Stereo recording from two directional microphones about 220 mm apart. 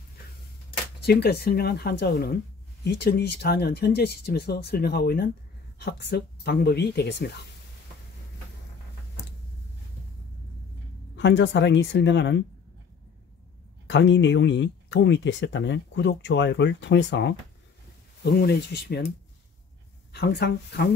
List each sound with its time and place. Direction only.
1.0 s a woman's voice: 45° left (ahead or behind)
11.1 s speech: 55° left (ahead or behind)
13.8 s a woman's voice: 55° left (ahead or behind)
20.1 s a woman's voice: 50° left (ahead or behind)